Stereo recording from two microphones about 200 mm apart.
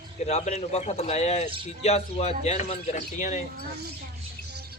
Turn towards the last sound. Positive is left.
turn(degrees=35)  # may be behind; listen again after turning